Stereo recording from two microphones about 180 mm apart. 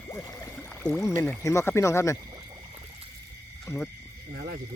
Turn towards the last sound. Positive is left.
turn(degrees=-50)  # may be behind; listen again after turning